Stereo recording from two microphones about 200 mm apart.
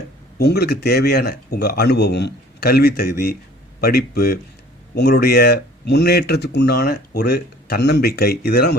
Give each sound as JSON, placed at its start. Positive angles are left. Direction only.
{"t": 0.3, "sound": "speech", "side_deg": 55}